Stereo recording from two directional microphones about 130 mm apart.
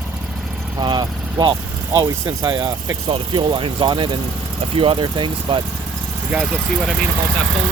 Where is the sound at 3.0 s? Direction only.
40° right (ahead or behind).